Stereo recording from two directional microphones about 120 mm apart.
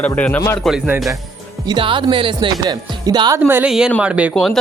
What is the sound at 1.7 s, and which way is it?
Speech, 45° right (ahead or behind).